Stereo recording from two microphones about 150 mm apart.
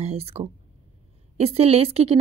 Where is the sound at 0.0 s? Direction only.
40° right (ahead or behind).